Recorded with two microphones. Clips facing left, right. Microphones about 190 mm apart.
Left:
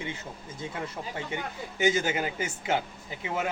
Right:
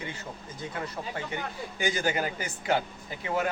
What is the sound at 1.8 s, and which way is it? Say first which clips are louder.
Speech: left 2 dB; 20° left (ahead or behind).